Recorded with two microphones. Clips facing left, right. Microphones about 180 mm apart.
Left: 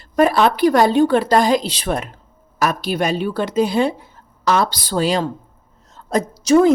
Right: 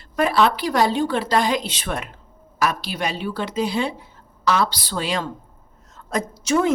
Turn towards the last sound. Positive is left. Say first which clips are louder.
# left 7 dB
turn(degrees=35)  # may be behind; listen again after turning